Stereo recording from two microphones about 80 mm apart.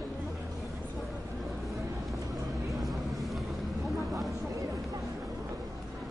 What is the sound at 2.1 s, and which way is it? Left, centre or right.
Vehicle, right.